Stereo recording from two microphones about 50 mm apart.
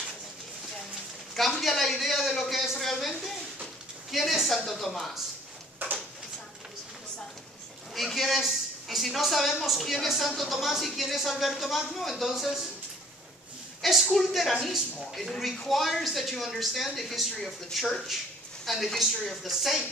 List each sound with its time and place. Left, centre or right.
1.6 s speech: centre
5.8 s a sound: right
7.9 s a woman's voice: centre
13.8 s speech: centre